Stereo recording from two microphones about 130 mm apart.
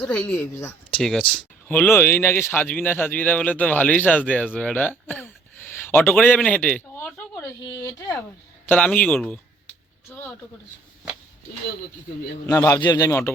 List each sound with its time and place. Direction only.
0.0 s speech: 10° left (ahead or behind)
6.9 s a sound: 15° left (ahead or behind)
7.8 s speech: 25° left (ahead or behind)
8.6 s speech: 10° left (ahead or behind)
10.1 s a sound: 15° left (ahead or behind)
12.5 s speech: 25° left (ahead or behind)